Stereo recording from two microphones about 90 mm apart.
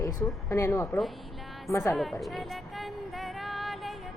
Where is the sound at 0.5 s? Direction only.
35° left (ahead or behind).